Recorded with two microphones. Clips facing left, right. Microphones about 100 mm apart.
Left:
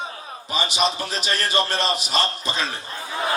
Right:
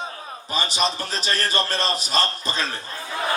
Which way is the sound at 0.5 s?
35° right (ahead or behind).